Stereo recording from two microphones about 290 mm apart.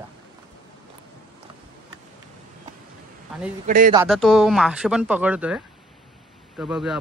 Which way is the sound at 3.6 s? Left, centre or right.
Right.